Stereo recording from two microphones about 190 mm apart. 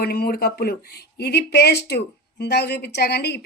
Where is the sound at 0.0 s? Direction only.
50° left (ahead or behind).